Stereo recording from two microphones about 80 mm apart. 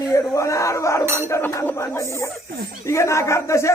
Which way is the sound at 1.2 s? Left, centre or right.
Left.